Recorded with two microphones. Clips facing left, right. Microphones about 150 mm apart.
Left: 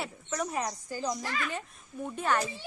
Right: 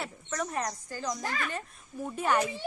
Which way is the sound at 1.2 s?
50° right (ahead or behind).